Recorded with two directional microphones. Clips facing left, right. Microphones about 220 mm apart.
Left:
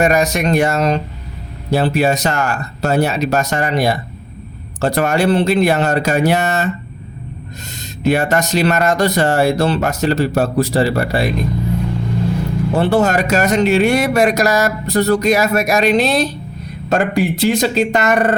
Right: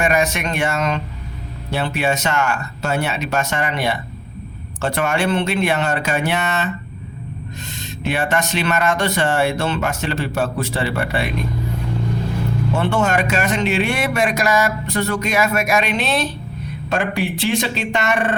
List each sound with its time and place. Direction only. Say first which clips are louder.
0.0 s speech: left 5 dB; 40° left (ahead or behind)
8.0 s speech: left 6 dB; 40° left (ahead or behind)
12.7 s speech: left 5 dB; 35° left (ahead or behind)